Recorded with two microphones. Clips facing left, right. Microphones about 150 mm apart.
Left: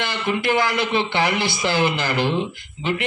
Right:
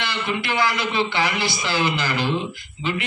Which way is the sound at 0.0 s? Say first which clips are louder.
Left 3 dB; 50° left (ahead or behind).